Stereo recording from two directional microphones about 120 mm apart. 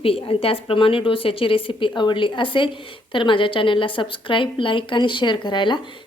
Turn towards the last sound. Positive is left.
turn(degrees=40)  # may be behind; listen again after turning